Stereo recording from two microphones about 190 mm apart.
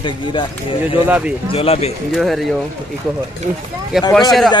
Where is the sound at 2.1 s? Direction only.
Centre (ahead or behind).